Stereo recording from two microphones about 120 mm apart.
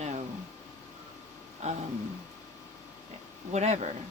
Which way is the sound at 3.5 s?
70° right (ahead or behind).